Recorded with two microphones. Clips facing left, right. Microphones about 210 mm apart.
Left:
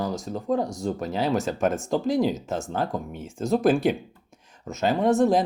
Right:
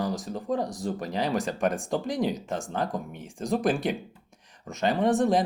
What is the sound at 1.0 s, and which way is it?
Speech, 5° left (ahead or behind).